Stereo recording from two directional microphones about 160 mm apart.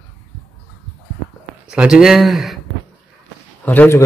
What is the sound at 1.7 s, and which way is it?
Speech, 5° right (ahead or behind).